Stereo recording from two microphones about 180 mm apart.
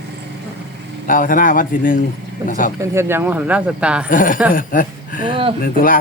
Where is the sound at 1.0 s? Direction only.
50° left (ahead or behind).